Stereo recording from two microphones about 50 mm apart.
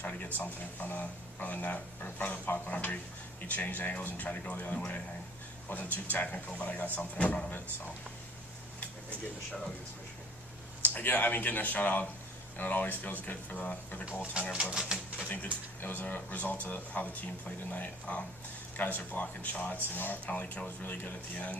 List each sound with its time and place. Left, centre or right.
0.0 s speech: left
7.2 s speech: left
10.8 s speech: left
14.5 s speech: centre
15.8 s speech: left